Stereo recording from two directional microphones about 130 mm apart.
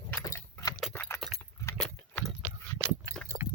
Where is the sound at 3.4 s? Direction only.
15° right (ahead or behind).